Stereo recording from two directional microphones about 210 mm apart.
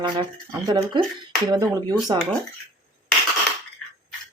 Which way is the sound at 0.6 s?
20° right (ahead or behind).